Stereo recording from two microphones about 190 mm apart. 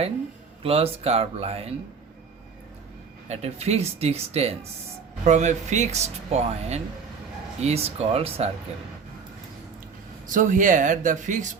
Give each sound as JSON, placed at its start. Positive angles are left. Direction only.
{"t": 0.6, "sound": "speech", "side_deg": -30}
{"t": 3.2, "sound": "speech", "side_deg": -35}
{"t": 10.3, "sound": "speech", "side_deg": -45}